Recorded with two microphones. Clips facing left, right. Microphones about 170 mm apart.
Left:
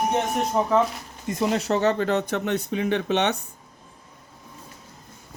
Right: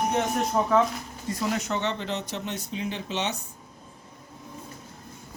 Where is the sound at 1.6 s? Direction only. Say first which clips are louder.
Left 7 dB; 40° left (ahead or behind); by 3.4 s 60° left (ahead or behind).